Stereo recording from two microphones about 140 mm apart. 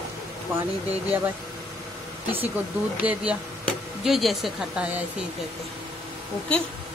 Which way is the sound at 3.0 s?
10° right (ahead or behind).